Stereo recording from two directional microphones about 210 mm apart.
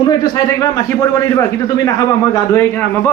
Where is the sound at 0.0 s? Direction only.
20° left (ahead or behind).